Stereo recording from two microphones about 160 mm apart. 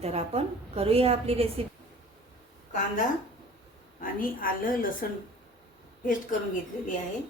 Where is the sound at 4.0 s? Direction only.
60° left (ahead or behind).